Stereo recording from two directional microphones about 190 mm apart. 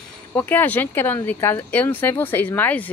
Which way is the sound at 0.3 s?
10° left (ahead or behind).